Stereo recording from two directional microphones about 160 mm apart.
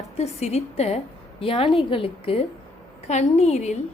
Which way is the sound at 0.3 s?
40° left (ahead or behind).